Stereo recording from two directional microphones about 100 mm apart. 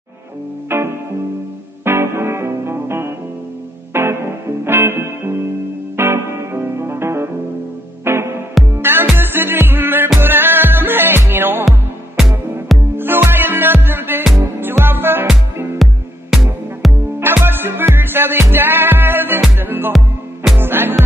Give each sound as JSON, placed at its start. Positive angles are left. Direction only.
{"t": 0.7, "sound": "music", "side_deg": -25}
{"t": 12.9, "sound": "music", "side_deg": -20}
{"t": 15.8, "sound": "music", "side_deg": -5}
{"t": 17.2, "sound": "music", "side_deg": -20}